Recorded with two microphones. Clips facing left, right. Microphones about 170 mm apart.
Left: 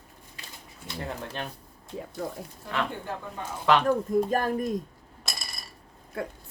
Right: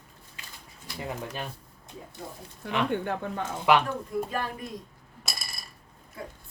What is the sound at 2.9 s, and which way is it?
Speech, 70° right (ahead or behind).